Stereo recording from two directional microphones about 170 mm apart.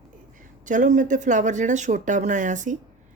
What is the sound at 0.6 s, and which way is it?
A woman's voice, 50° right (ahead or behind).